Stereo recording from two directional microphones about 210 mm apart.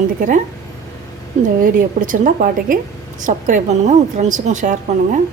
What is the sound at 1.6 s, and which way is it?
Speech, 40° right (ahead or behind).